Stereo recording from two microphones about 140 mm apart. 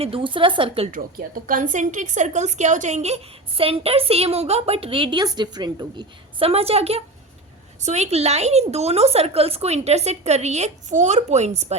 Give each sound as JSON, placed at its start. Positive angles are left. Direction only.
{"t": 0.0, "sound": "a woman's voice", "side_deg": -40}
{"t": 0.9, "sound": "a woman's voice", "side_deg": -75}
{"t": 6.4, "sound": "a woman's voice", "side_deg": -45}